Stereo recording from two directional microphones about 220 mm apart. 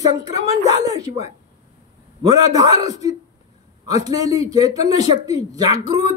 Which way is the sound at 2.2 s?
15° right (ahead or behind).